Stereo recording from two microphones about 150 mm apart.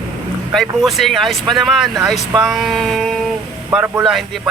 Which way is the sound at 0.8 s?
Centre (ahead or behind).